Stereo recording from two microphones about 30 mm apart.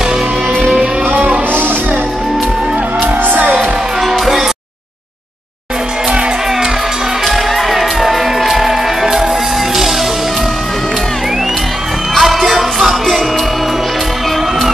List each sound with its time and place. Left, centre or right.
1.1 s music: right
3.0 s music: right
4.0 s music: centre
7.2 s music: centre
12.2 s music: centre